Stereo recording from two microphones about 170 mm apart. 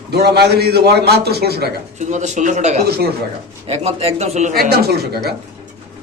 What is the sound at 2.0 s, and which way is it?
A man's voice, 45° right (ahead or behind).